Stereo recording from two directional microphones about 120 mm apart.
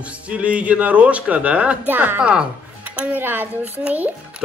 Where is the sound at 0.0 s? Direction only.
10° right (ahead or behind).